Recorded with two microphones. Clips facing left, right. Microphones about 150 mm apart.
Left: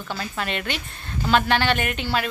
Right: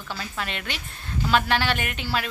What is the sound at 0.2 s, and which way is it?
Speech, centre (ahead or behind).